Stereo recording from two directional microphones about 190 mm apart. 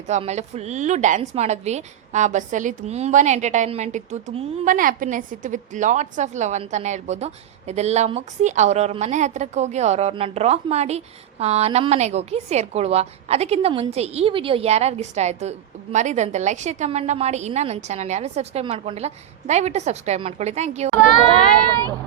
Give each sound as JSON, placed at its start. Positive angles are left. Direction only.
{"t": 0.1, "sound": "a woman's voice", "side_deg": -35}